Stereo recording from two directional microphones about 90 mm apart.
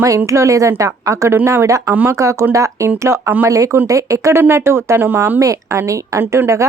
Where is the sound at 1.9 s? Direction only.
25° right (ahead or behind).